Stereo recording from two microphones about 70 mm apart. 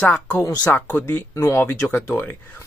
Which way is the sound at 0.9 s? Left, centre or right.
Left.